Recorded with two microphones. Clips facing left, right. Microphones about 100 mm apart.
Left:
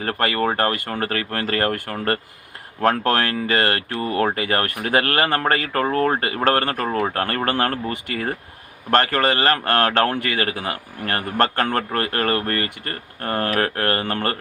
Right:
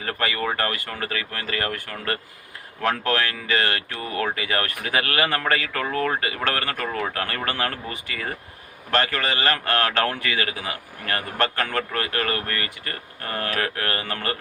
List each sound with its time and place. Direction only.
0.0 s speech: 45° left (ahead or behind)
1.0 s speech: 50° left (ahead or behind)